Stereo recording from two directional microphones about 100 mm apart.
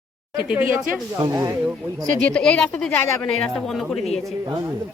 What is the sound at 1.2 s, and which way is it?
Speech, 35° right (ahead or behind).